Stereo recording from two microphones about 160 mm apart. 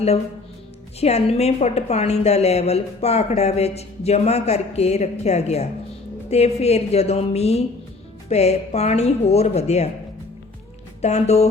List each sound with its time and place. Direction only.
0.9 s a woman's voice: 40° left (ahead or behind)
11.0 s speech: 45° left (ahead or behind)